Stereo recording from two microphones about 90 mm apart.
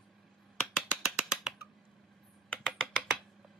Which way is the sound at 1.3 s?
5° right (ahead or behind).